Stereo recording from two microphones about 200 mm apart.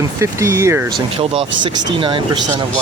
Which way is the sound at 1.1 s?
25° right (ahead or behind).